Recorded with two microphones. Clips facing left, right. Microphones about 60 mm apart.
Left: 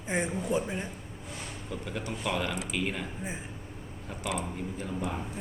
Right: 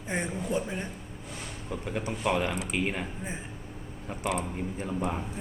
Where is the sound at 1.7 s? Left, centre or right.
Right.